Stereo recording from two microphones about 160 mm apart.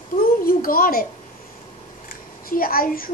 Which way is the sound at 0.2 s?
65° left (ahead or behind).